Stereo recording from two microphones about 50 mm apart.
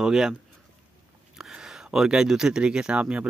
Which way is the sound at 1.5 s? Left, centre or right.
Centre.